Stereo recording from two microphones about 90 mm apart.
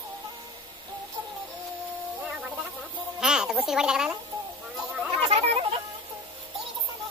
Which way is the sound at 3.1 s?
5° right (ahead or behind).